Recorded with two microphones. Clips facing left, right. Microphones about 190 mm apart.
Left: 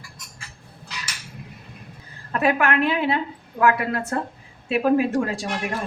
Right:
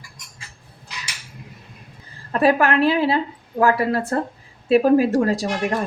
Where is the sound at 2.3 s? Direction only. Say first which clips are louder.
Right 4 dB; 35° right (ahead or behind).